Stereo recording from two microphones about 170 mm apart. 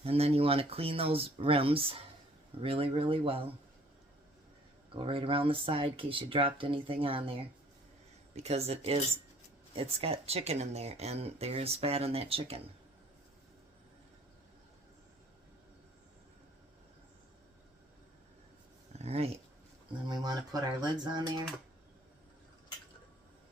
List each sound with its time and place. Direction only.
0.0 s speech: 35° right (ahead or behind)
4.9 s speech: 30° right (ahead or behind)
8.4 s speech: 35° right (ahead or behind)
18.9 s speech: 35° right (ahead or behind)
20.1 s speech: 25° right (ahead or behind)